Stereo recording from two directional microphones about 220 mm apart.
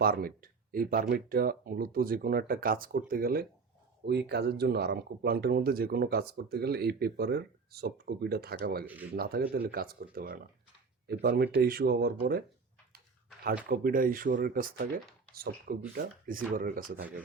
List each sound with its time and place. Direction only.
0.0 s speech: 40° right (ahead or behind)
13.7 s speech: 40° right (ahead or behind)